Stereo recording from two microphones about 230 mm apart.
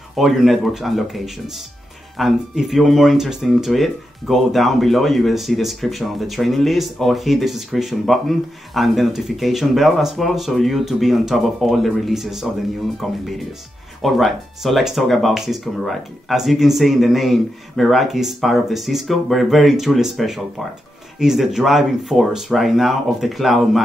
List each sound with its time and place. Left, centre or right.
0.1 s speech: centre